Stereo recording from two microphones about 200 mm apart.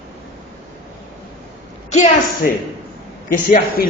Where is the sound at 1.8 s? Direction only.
35° left (ahead or behind).